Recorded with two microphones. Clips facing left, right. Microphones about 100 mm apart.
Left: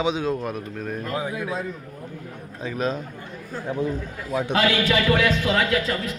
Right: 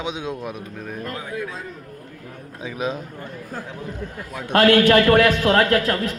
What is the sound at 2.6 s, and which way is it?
Speech, 5° right (ahead or behind).